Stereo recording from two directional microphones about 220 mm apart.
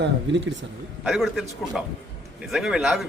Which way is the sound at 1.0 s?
Centre (ahead or behind).